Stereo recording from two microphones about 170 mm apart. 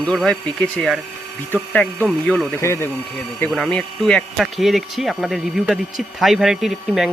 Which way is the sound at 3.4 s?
5° left (ahead or behind).